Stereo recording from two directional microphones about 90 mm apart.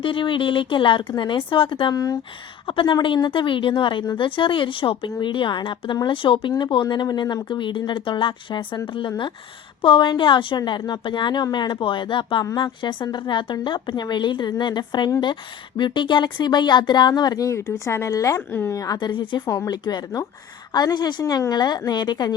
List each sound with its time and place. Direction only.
0.0 s speech: 70° left (ahead or behind)
1.9 s speech: 45° left (ahead or behind)
2.6 s a woman's voice: 75° left (ahead or behind)
5.2 s a woman's voice: 60° left (ahead or behind)
10.7 s a woman's voice: 55° left (ahead or behind); by 18.8 s 30° left (ahead or behind)
18.9 s a woman's voice: 60° left (ahead or behind)
19.5 s speech: 45° left (ahead or behind)